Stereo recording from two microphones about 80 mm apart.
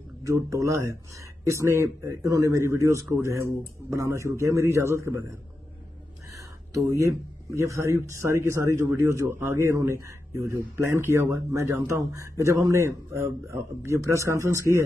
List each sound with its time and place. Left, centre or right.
0.2 s speech: right
6.3 s a sound: right
7.5 s speech: right